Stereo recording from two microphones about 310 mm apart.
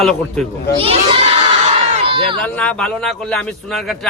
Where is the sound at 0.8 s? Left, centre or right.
Centre.